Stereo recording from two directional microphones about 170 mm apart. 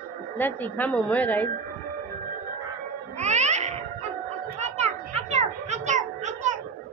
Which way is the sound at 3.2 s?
45° right (ahead or behind).